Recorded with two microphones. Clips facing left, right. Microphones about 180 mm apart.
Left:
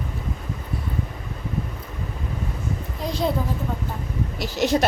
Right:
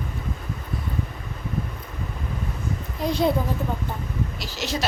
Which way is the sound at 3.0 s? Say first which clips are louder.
Right 4 dB; centre (ahead or behind).